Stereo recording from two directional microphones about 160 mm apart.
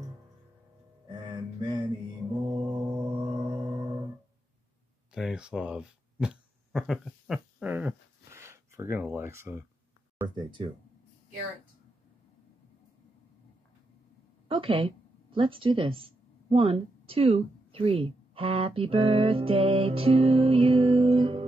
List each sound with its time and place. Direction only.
1.0 s a sound: 30° right (ahead or behind)
2.4 s mantra: 30° right (ahead or behind)
5.1 s speech: 5° right (ahead or behind)
10.2 s speech: 30° right (ahead or behind)
14.5 s speech: 35° right (ahead or behind)